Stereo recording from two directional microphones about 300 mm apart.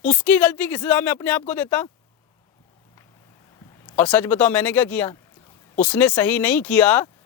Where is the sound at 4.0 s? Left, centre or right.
Centre.